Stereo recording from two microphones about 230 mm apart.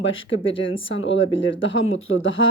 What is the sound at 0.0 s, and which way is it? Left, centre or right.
Speech, left.